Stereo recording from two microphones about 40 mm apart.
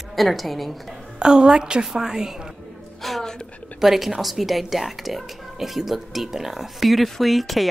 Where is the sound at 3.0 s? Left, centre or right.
Centre.